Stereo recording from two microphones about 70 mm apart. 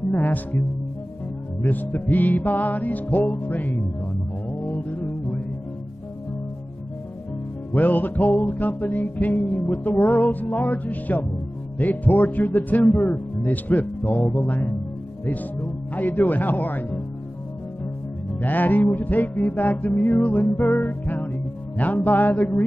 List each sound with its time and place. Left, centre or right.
0.1 s music: left
1.7 s music: left
7.7 s music: left
13.4 s speech: left
14.4 s music: left
15.9 s music: left
18.4 s music: left